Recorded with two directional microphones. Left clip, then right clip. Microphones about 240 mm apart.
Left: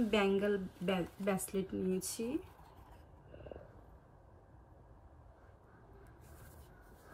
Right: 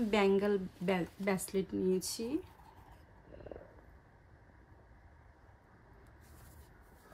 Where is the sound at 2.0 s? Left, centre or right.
Centre.